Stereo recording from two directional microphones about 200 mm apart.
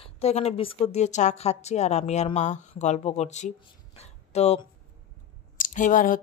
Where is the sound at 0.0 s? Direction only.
30° left (ahead or behind).